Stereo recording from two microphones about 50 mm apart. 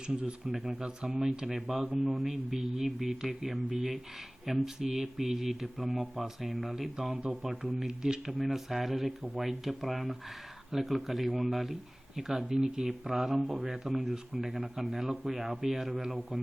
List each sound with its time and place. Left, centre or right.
0.1 s speech: right
0.4 s speech: centre
7.1 s speech: centre
7.4 s speech: centre